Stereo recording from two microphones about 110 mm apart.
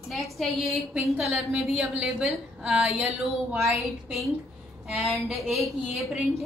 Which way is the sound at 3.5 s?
25° right (ahead or behind).